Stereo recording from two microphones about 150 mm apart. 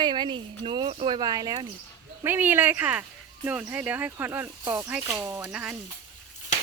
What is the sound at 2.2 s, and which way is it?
Speech, 15° right (ahead or behind).